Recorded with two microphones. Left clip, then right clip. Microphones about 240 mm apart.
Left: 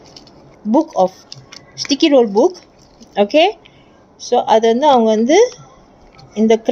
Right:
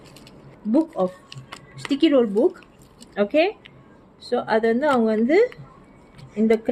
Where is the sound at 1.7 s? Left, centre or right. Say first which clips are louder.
Left 6 dB; centre.